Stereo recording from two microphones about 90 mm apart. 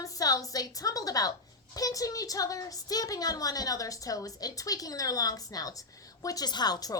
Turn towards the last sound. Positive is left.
turn(degrees=45)  # may be behind; listen again after turning